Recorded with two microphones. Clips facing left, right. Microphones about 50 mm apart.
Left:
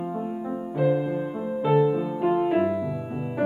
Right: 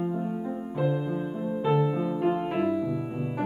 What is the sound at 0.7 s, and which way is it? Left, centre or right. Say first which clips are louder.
Music: left 5 dB; centre.